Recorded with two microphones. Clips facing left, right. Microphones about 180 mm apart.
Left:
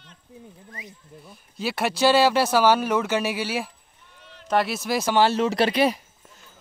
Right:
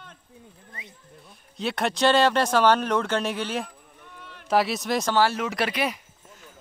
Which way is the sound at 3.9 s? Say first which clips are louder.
Right 4 dB; 60° right (ahead or behind).